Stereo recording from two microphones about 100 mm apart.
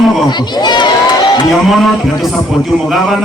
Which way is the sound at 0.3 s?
45° left (ahead or behind).